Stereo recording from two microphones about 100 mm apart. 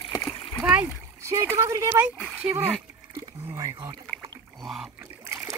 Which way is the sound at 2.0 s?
15° right (ahead or behind).